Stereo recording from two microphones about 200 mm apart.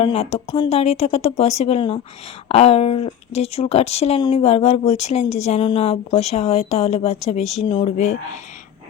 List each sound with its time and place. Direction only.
0.0 s speech: 30° left (ahead or behind)